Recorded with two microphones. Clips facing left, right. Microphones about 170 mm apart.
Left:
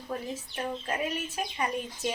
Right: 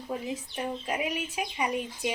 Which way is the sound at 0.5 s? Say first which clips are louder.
Even; 15° right (ahead or behind).